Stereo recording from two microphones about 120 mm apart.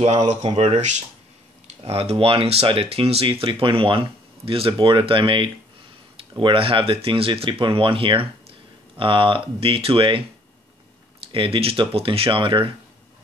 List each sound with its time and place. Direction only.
0.0 s speech: 65° right (ahead or behind)
1.9 s speech: 55° right (ahead or behind)
11.3 s speech: 45° right (ahead or behind)